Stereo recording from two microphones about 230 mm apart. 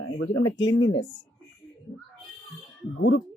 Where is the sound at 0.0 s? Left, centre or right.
Left.